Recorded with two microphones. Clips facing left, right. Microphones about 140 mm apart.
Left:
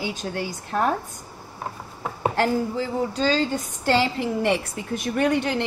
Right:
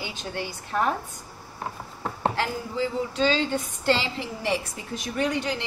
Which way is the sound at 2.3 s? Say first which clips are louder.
Left 5 dB; 45° left (ahead or behind).